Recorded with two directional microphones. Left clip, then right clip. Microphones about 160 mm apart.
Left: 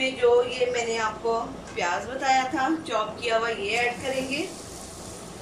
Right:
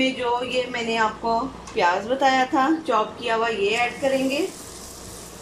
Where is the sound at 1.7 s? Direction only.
50° right (ahead or behind).